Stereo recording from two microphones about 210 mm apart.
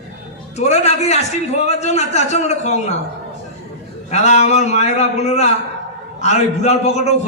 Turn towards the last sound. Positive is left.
turn(degrees=30)  # may be behind; listen again after turning